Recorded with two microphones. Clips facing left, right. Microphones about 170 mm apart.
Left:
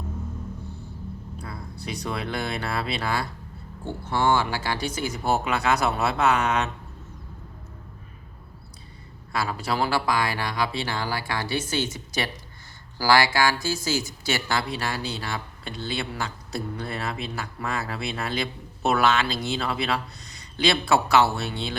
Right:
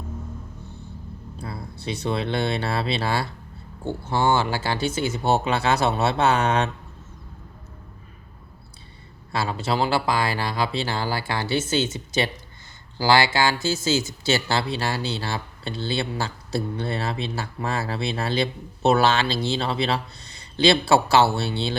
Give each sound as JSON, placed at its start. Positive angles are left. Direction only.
{"t": 1.4, "sound": "speech", "side_deg": -30}
{"t": 9.3, "sound": "speech", "side_deg": -25}